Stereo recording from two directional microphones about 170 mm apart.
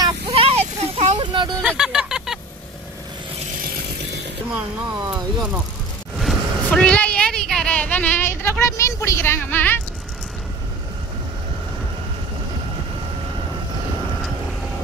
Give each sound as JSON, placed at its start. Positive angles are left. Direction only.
{"t": 0.3, "sound": "vehicle", "side_deg": -35}
{"t": 1.6, "sound": "a sound", "side_deg": -5}
{"t": 5.1, "sound": "speech", "side_deg": -5}
{"t": 6.1, "sound": "vehicle", "side_deg": 0}